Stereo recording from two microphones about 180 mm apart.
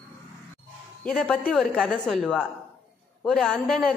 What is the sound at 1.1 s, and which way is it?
A woman's voice, 5° left (ahead or behind).